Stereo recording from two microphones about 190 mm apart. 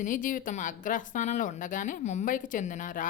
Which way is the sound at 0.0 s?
45° left (ahead or behind).